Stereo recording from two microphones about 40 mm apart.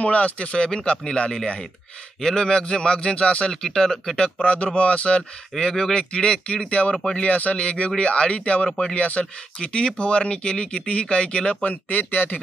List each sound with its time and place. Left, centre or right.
0.0 s speech: left
3.6 s speech: centre
4.4 s speech: left
5.6 s a man's voice: centre; by 8.6 s left
8.6 s speech: centre
8.9 s a man's voice: left
9.2 s speech: left
11.6 s speech: left